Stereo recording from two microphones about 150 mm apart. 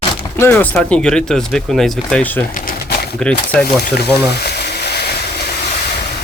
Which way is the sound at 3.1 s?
5° left (ahead or behind).